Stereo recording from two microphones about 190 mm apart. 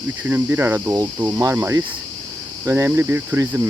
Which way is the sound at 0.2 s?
10° right (ahead or behind).